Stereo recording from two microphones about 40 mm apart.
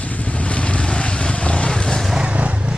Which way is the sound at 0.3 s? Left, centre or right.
Left.